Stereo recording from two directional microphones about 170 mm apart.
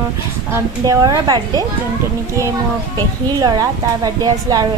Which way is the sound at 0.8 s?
25° right (ahead or behind).